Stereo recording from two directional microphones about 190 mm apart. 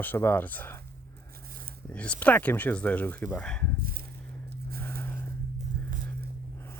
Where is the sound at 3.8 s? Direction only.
50° right (ahead or behind).